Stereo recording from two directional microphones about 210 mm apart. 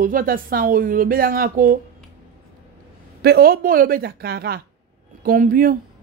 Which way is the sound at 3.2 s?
45° right (ahead or behind).